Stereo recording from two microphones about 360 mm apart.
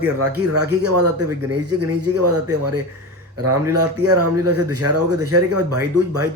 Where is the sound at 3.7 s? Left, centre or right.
Right.